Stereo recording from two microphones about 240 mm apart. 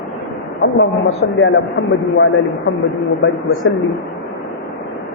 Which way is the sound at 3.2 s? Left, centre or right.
Left.